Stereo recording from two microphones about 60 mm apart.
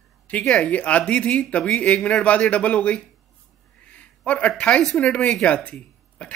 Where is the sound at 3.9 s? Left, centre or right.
Left.